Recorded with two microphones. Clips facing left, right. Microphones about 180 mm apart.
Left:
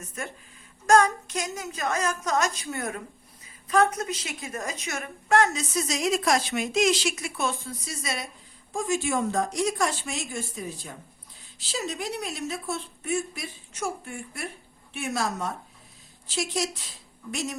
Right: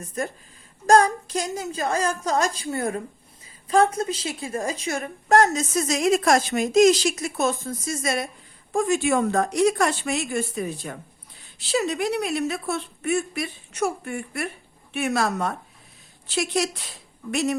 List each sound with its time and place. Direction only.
0.2 s a woman's voice: 35° right (ahead or behind)
8.7 s a woman's voice: 65° right (ahead or behind)